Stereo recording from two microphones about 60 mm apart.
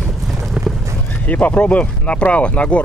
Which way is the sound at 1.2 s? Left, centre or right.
Left.